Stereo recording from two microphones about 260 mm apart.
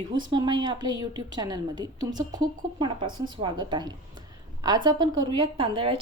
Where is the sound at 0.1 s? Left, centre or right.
Centre.